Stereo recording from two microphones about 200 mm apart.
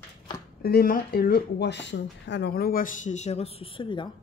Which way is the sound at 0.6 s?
45° left (ahead or behind).